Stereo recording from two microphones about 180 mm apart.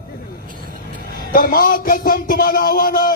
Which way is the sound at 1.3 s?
55° left (ahead or behind).